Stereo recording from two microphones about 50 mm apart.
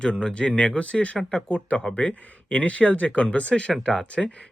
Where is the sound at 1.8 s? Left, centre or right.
Centre.